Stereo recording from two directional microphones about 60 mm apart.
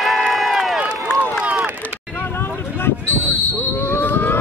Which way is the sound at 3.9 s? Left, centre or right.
Left.